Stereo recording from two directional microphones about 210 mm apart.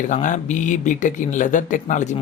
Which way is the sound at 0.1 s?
35° left (ahead or behind).